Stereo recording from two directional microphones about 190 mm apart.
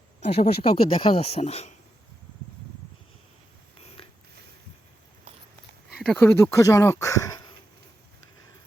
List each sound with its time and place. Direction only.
0.2 s speech: 30° left (ahead or behind)
3.8 s a sound: 30° left (ahead or behind)
5.9 s speech: 5° left (ahead or behind)